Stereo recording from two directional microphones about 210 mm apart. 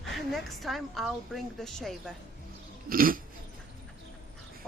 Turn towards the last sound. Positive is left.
turn(degrees=-40)  # may be behind; listen again after turning